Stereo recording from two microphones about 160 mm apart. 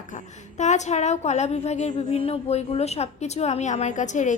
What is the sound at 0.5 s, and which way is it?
A woman's voice, 45° left (ahead or behind).